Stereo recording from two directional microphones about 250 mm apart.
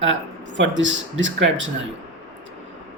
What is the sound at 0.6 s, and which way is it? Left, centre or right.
Speech, right.